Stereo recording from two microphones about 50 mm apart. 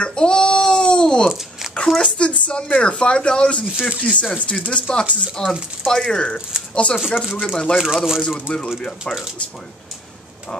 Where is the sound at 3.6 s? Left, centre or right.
Centre.